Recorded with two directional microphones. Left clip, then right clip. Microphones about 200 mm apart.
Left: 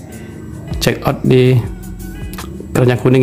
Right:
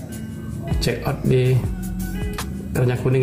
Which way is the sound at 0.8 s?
50° left (ahead or behind).